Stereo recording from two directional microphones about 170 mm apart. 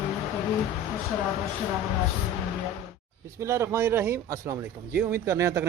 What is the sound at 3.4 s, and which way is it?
Speech, 15° right (ahead or behind).